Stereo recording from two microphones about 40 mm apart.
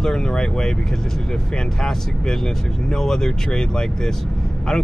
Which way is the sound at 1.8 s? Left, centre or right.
Centre.